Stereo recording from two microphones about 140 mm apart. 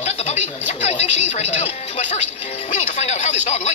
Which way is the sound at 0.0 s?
50° left (ahead or behind).